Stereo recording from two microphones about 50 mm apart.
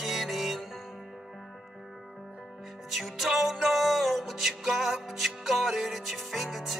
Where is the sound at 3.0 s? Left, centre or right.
Centre.